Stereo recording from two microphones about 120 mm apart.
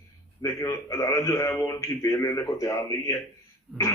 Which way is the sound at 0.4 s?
25° left (ahead or behind).